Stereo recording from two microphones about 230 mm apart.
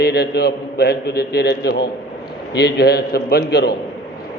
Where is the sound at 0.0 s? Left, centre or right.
Left.